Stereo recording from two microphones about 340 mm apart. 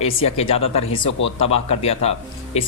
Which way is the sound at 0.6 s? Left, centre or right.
Left.